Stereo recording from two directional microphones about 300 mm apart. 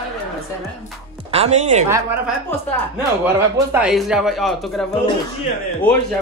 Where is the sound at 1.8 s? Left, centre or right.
Centre.